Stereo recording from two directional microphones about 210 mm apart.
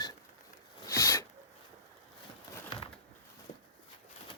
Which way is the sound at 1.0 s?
15° left (ahead or behind).